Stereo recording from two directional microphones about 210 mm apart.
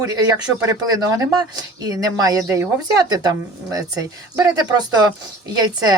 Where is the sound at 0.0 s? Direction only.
15° right (ahead or behind).